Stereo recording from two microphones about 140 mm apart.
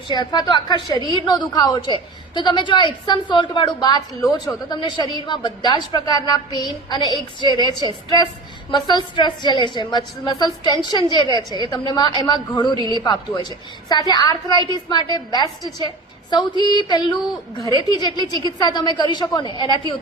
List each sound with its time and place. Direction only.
0.1 s a woman's voice: 30° left (ahead or behind)
8.7 s a woman's voice: 30° left (ahead or behind)